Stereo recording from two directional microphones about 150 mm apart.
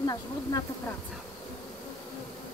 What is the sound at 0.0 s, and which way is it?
Speech, 25° left (ahead or behind).